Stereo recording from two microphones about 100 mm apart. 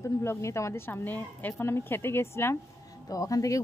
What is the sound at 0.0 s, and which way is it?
Speech, 30° left (ahead or behind).